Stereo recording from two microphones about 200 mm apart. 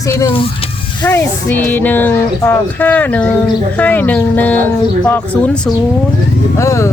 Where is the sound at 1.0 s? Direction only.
10° left (ahead or behind).